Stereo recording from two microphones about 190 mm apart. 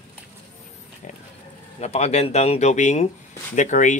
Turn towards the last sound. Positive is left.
turn(degrees=40)  # may be behind; listen again after turning